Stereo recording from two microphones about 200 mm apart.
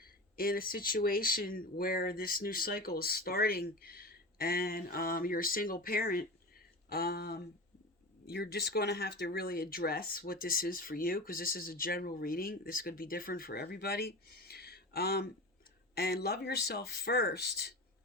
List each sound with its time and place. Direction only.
0.0 s speech: 45° left (ahead or behind)